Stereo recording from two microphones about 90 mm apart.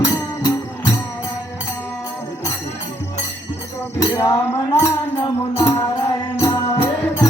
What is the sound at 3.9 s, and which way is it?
Music, 30° left (ahead or behind).